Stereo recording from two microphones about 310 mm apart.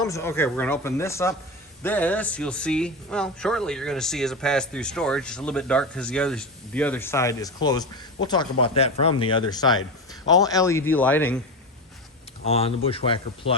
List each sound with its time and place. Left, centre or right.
0.1 s speech: centre
12.5 s speech: centre